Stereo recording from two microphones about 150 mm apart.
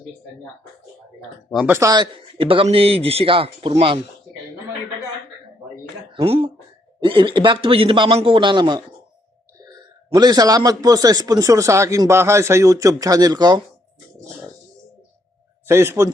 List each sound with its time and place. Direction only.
1.6 s a man's voice: 20° right (ahead or behind); by 4.0 s 35° right (ahead or behind)
6.1 s a man's voice: 40° right (ahead or behind)
10.2 s a man's voice: 25° right (ahead or behind)
15.6 s a man's voice: 15° right (ahead or behind)